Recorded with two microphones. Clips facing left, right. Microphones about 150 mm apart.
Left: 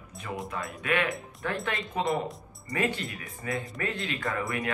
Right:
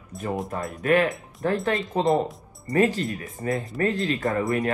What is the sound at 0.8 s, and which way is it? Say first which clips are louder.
A woman's voice: right 8 dB; 40° right (ahead or behind).